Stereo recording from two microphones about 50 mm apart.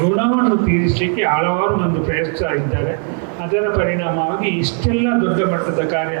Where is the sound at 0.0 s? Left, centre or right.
Right.